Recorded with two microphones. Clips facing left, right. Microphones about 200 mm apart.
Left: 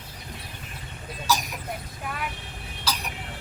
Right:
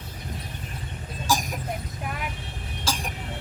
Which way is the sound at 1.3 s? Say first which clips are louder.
Right 1 dB; 45° right (ahead or behind).